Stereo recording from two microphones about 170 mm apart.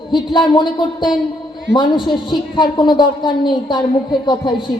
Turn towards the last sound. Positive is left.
turn(degrees=25)  # may be behind; listen again after turning